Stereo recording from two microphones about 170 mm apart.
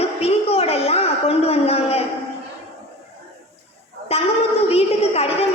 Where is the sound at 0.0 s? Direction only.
35° left (ahead or behind).